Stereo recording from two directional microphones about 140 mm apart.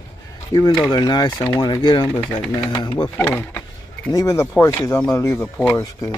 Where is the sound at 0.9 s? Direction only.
30° left (ahead or behind).